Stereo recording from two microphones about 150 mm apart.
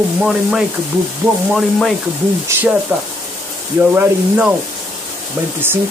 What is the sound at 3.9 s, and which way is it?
Speech, 10° right (ahead or behind).